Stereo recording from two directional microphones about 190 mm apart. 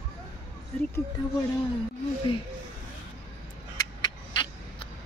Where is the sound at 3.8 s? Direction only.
20° left (ahead or behind).